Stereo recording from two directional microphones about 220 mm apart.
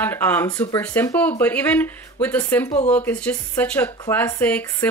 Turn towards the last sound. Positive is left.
turn(degrees=10)  # may be behind; listen again after turning